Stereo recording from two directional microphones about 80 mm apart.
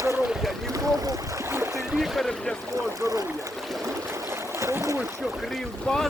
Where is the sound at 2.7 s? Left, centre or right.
Right.